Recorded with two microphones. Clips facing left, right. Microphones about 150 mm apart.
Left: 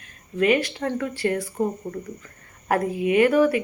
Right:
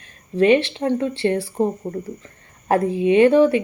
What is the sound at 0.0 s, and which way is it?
Speech, 30° right (ahead or behind).